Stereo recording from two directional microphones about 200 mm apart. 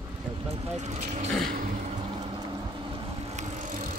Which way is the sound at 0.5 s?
35° right (ahead or behind).